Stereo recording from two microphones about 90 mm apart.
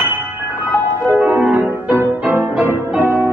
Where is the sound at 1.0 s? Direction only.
15° right (ahead or behind).